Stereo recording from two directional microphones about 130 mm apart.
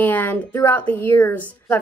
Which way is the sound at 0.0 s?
15° left (ahead or behind).